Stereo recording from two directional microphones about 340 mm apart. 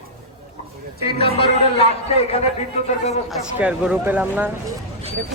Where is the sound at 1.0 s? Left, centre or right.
Centre.